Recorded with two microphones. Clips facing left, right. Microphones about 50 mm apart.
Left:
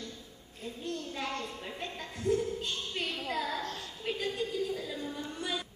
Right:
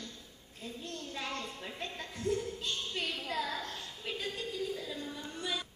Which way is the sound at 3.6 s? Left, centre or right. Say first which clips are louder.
Left 3 dB; left.